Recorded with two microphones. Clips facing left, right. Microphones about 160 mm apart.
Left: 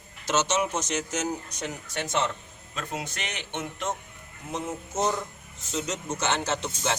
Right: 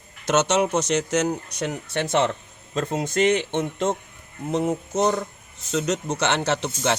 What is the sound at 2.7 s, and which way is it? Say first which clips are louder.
Speech: right 11 dB; 40° right (ahead or behind).